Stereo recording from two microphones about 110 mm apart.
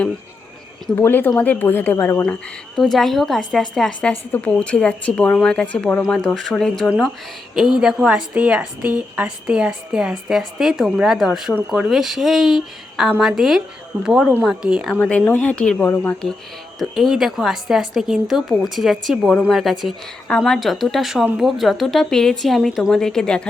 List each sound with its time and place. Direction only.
0.9 s speech: 20° left (ahead or behind)
2.2 s a woman's voice: 5° left (ahead or behind)
15.0 s speech: 5° left (ahead or behind)
16.7 s a woman's voice: centre (ahead or behind)